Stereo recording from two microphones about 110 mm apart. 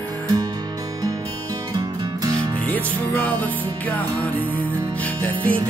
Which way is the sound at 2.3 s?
15° left (ahead or behind).